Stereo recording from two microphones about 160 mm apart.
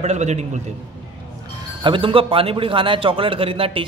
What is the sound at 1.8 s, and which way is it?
A man's voice, 30° right (ahead or behind).